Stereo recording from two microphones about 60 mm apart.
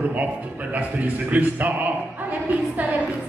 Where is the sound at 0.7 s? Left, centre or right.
Right.